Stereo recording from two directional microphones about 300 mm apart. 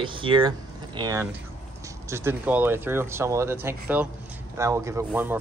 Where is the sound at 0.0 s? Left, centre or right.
Centre.